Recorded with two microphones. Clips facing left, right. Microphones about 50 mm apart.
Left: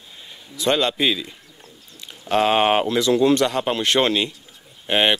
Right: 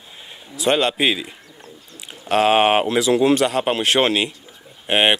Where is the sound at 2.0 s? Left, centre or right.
Centre.